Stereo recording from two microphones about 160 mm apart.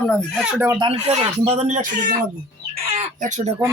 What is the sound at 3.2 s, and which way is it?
Speech, 45° right (ahead or behind).